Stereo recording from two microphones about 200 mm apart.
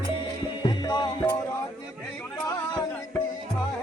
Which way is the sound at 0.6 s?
20° left (ahead or behind).